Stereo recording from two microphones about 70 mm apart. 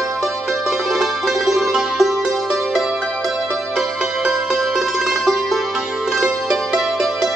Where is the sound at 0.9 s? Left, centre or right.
Centre.